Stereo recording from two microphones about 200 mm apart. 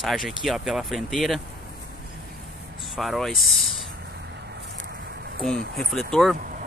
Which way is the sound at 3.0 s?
Centre (ahead or behind).